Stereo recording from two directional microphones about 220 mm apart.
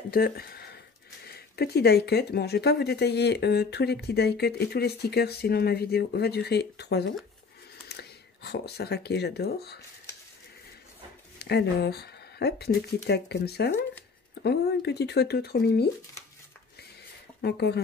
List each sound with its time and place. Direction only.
0.1 s speech: 45° left (ahead or behind)
11.3 s speech: 50° left (ahead or behind)
17.4 s speech: 50° left (ahead or behind)